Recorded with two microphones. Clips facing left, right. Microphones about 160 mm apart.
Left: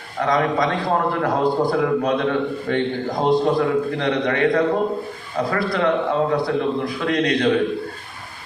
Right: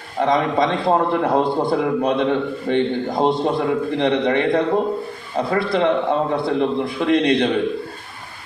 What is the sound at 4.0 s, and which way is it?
A man's voice, 25° right (ahead or behind).